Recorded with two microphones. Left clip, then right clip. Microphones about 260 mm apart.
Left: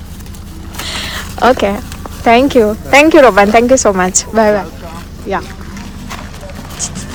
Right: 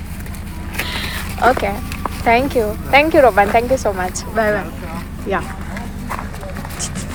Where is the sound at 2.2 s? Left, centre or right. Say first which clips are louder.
Left 7 dB; left.